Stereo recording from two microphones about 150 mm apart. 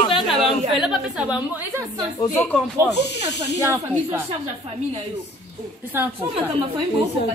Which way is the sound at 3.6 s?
20° right (ahead or behind).